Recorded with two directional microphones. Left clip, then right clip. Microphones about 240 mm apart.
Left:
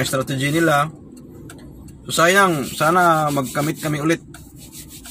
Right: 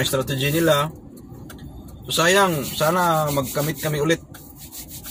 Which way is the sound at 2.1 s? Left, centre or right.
Centre.